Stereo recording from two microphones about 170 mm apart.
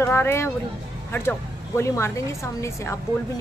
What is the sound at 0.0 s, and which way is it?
Speech, 15° left (ahead or behind).